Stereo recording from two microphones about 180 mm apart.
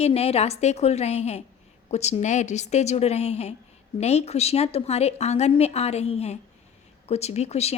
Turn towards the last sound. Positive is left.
turn(degrees=35)  # may be behind; listen again after turning